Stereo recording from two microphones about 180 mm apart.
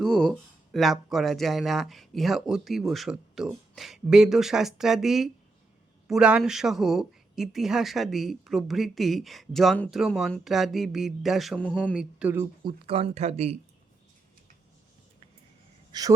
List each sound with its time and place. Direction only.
0.0 s speech: 5° left (ahead or behind)
11.9 s speech: 10° right (ahead or behind)
12.6 s speech: 30° right (ahead or behind)
15.9 s speech: 20° right (ahead or behind)